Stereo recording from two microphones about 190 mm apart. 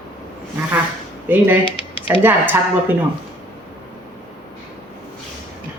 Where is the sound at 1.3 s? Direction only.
10° right (ahead or behind).